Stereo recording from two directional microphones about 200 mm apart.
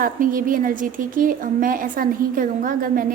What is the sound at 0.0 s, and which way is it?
A woman's voice, 45° right (ahead or behind).